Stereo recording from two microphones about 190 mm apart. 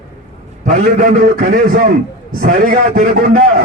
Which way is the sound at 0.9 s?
50° right (ahead or behind).